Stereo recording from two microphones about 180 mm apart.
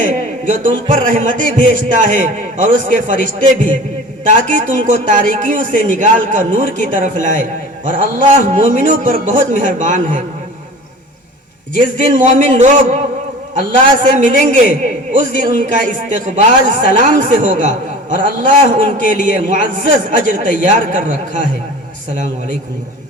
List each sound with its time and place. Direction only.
0.0 s a man's voice: 45° right (ahead or behind)
11.7 s a man's voice: 45° right (ahead or behind)